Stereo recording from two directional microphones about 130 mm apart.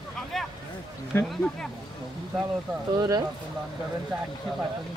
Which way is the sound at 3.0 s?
30° right (ahead or behind).